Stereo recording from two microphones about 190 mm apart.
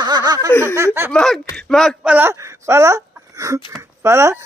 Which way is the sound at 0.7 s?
15° right (ahead or behind).